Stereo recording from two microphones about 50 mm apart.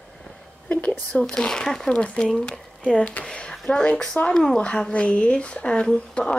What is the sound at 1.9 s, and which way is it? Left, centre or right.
Speech, left.